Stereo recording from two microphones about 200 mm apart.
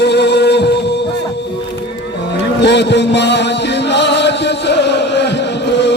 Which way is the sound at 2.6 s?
60° left (ahead or behind).